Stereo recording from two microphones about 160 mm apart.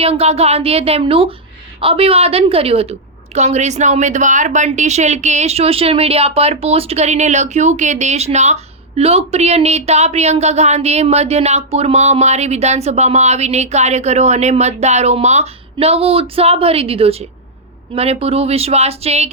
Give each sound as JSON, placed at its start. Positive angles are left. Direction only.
{"t": 0.0, "sound": "a woman's voice", "side_deg": -40}